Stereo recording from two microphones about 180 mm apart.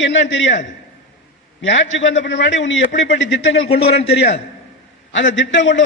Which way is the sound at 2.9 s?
80° left.